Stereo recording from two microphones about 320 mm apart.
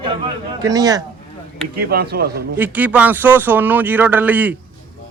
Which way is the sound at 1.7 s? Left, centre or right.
Right.